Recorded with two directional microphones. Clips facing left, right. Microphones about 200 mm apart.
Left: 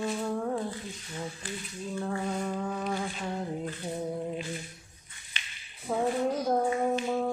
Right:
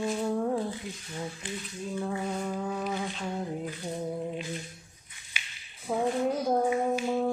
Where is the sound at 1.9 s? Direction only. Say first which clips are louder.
Even; 10° right (ahead or behind).